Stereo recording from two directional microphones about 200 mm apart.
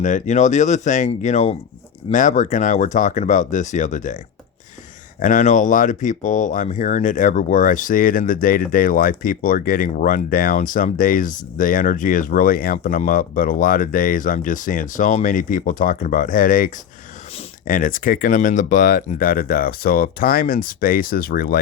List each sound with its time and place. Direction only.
0.0 s speech: 35° left (ahead or behind)
5.2 s speech: 40° left (ahead or behind)